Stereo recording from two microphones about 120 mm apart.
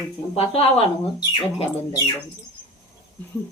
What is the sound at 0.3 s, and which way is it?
Speech, 55° left (ahead or behind).